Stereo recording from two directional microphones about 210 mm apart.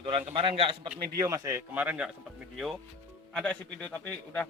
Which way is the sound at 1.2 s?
15° right (ahead or behind).